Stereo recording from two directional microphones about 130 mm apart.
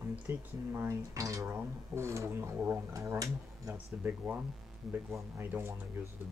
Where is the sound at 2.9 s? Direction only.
25° right (ahead or behind).